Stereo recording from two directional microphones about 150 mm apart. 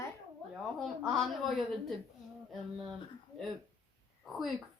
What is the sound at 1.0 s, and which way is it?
Speech, centre (ahead or behind).